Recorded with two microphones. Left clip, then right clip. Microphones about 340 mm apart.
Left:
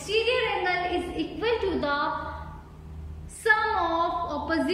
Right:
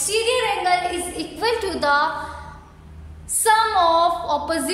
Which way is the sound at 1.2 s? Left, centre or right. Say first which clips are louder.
Right 6 dB; centre.